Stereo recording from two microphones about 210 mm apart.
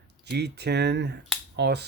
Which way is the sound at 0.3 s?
50° right (ahead or behind).